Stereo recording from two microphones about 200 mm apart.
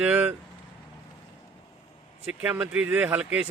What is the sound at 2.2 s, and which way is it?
Speech, 5° right (ahead or behind).